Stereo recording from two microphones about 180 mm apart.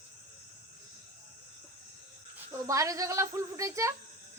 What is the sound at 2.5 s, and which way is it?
Speech, 15° right (ahead or behind).